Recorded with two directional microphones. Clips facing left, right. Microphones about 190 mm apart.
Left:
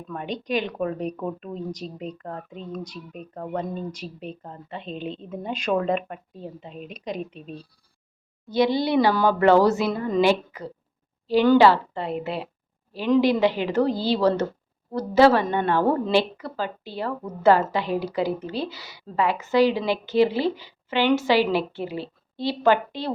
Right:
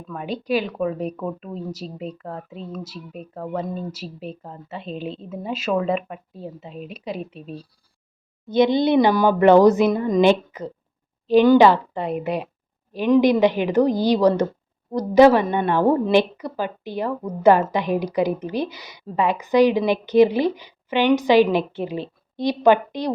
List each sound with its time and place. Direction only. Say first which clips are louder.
0.1 s a woman's voice: right 4 dB; 5° right (ahead or behind)
7.2 s a woman's voice: right 1 dB; 40° right (ahead or behind)
8.4 s a woman's voice: right 4 dB; 20° right (ahead or behind)